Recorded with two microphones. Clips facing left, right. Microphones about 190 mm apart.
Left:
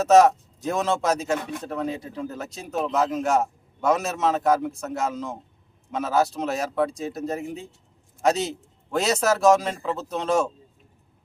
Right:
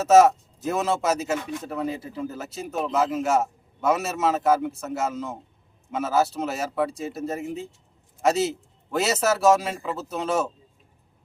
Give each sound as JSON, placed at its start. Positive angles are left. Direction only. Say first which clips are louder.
{"t": 0.0, "sound": "a man's voice", "louder": "even", "side_deg": -5}